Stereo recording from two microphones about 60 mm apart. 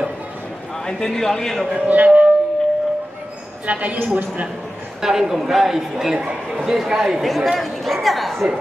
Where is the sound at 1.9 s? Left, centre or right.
Right.